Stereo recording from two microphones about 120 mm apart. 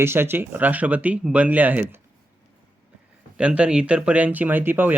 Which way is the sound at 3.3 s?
10° right (ahead or behind).